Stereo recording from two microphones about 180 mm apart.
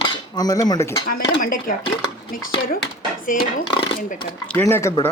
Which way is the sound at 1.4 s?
50° left (ahead or behind).